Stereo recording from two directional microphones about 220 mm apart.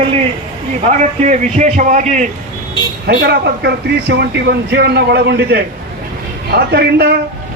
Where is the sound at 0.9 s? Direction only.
30° right (ahead or behind).